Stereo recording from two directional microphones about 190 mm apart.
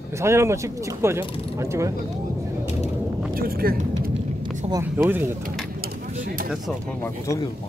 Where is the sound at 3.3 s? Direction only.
50° right (ahead or behind).